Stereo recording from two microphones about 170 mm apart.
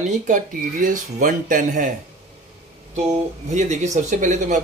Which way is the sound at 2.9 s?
45° right (ahead or behind).